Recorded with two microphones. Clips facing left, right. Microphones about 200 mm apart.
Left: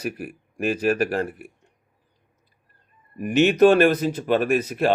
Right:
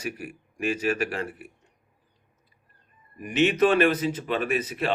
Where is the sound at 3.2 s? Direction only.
50° left (ahead or behind).